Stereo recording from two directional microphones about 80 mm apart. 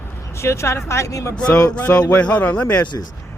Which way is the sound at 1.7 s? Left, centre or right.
Centre.